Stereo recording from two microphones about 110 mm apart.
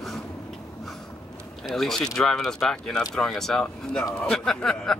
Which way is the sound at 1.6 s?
5° left (ahead or behind).